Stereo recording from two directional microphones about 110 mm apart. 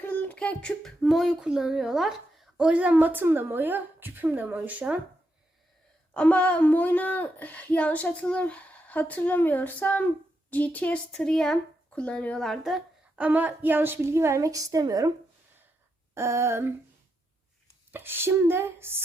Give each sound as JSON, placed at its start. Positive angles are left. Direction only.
{"t": 0.0, "sound": "child singing", "side_deg": 15}
{"t": 6.1, "sound": "speech", "side_deg": 10}
{"t": 13.1, "sound": "a woman's voice", "side_deg": -15}
{"t": 16.1, "sound": "a woman's voice", "side_deg": -25}
{"t": 17.9, "sound": "a woman's voice", "side_deg": -20}